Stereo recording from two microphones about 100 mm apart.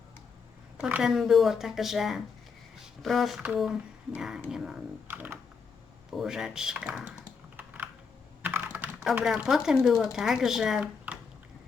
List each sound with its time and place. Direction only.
0.8 s a woman's voice: 10° right (ahead or behind)
5.0 s typing: 20° right (ahead or behind)
6.1 s speech: 5° right (ahead or behind)
7.5 s computer keyboard: 15° right (ahead or behind)
9.2 s speech: 5° right (ahead or behind)